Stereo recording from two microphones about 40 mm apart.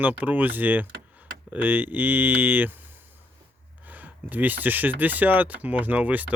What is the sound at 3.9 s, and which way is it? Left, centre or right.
Speech, right.